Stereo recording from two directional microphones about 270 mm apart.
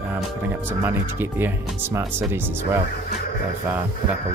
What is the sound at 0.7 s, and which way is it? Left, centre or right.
Speech, centre.